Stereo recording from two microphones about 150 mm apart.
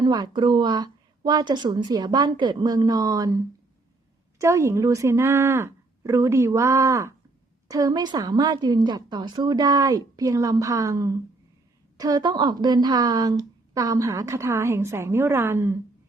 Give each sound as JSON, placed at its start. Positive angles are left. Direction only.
{"t": 0.0, "sound": "a woman's voice", "side_deg": -30}